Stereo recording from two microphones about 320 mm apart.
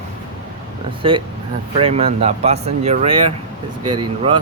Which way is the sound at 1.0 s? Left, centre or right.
Centre.